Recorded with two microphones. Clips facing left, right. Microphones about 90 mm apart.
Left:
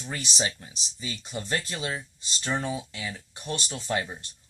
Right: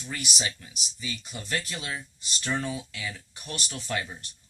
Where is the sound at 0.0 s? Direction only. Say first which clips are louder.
Left 3 dB; 30° left (ahead or behind).